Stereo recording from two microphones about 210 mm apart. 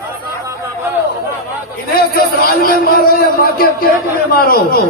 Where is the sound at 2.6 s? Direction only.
45° left (ahead or behind).